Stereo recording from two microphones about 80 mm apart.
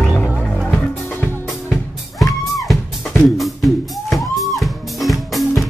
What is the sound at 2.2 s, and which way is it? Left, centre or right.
Music, centre.